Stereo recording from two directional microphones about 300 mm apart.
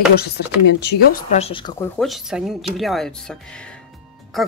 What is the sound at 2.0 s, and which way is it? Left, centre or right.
Speech, centre.